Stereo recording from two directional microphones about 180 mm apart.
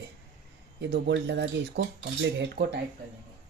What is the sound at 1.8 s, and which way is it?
Speech, 65° right (ahead or behind).